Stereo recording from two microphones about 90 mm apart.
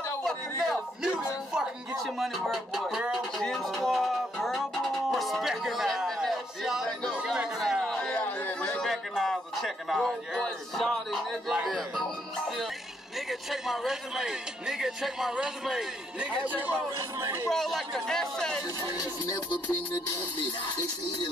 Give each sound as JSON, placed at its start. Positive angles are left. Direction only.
{"t": 0.2, "sound": "a man's voice", "side_deg": 5}
{"t": 1.5, "sound": "speech", "side_deg": -10}
{"t": 3.4, "sound": "music", "side_deg": 0}
{"t": 7.1, "sound": "chatter", "side_deg": -10}
{"t": 11.6, "sound": "speech", "side_deg": 5}
{"t": 17.5, "sound": "speech", "side_deg": 5}